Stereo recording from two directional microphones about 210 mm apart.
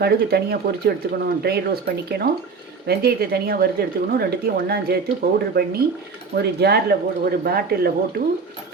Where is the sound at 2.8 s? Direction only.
45° right (ahead or behind).